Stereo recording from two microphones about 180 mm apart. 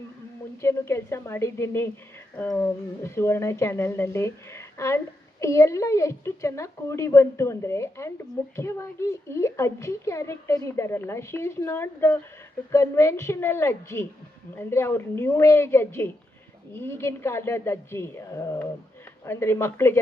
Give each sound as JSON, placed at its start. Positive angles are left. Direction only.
{"t": 0.6, "sound": "speech", "side_deg": 15}